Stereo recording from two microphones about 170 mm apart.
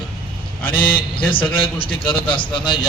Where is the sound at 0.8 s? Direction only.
30° left (ahead or behind).